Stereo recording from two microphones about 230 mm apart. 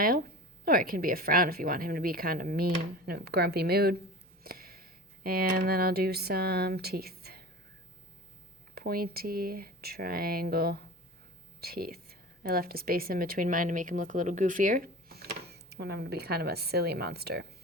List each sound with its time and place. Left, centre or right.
0.0 s speech: right
8.7 s speech: right